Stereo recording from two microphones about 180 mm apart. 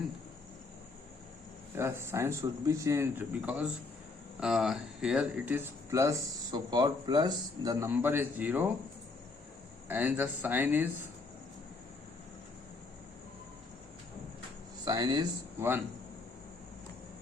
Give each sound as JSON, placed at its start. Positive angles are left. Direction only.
{"t": 1.7, "sound": "speech", "side_deg": -15}
{"t": 9.9, "sound": "speech", "side_deg": -10}
{"t": 14.8, "sound": "speech", "side_deg": -20}